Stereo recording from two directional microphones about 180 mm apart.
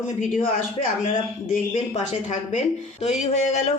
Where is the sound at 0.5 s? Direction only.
45° left (ahead or behind).